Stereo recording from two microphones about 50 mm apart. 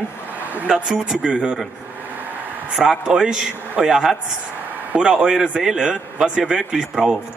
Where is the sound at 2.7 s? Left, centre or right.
Centre.